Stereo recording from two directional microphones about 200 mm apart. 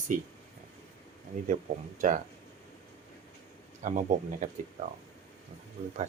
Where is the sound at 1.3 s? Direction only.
35° right (ahead or behind).